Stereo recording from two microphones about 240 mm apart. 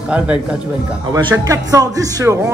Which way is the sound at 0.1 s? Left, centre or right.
Centre.